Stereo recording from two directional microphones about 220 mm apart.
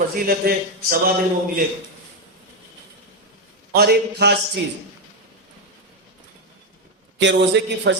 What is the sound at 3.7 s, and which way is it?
Speech, 50° right (ahead or behind).